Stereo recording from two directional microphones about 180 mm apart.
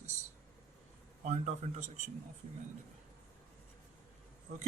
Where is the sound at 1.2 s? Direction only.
40° right (ahead or behind).